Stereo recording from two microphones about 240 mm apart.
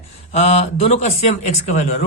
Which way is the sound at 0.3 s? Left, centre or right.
Left.